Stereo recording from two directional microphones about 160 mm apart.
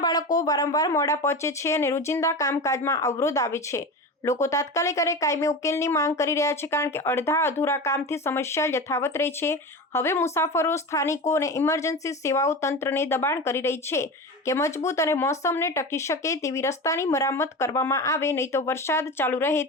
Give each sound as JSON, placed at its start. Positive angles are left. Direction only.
{"t": 0.0, "sound": "speech", "side_deg": 25}